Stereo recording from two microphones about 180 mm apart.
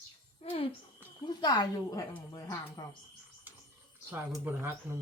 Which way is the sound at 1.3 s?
25° left (ahead or behind).